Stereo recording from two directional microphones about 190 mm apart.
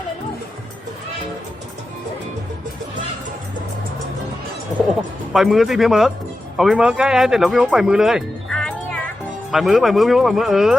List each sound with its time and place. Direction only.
5.3 s speech: centre (ahead or behind)